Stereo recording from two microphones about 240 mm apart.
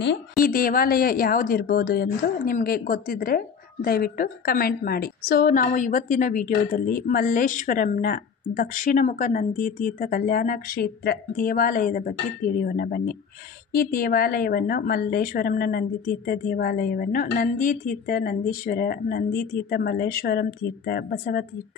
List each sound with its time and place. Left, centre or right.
0.4 s speech: left